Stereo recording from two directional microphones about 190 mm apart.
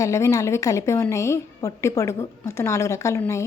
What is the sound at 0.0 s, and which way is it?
A woman's voice, 15° left (ahead or behind).